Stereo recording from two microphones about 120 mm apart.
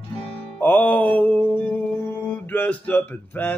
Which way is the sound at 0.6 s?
15° left (ahead or behind).